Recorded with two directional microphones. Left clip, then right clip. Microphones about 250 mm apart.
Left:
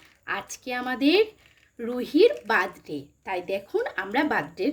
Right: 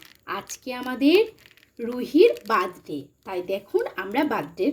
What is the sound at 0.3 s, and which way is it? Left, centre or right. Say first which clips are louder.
Speech: left 1 dB; centre.